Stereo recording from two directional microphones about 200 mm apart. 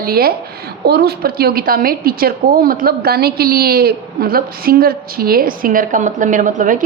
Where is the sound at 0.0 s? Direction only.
50° right (ahead or behind).